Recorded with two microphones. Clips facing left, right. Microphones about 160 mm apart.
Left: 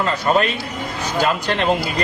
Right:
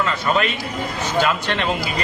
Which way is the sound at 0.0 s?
35° left (ahead or behind).